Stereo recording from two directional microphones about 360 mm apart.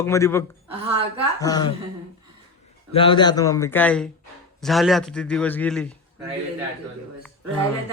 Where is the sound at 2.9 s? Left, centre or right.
Centre.